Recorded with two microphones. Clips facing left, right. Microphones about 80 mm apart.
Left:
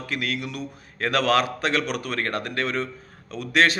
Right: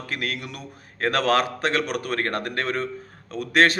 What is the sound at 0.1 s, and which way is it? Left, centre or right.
A man's voice, right.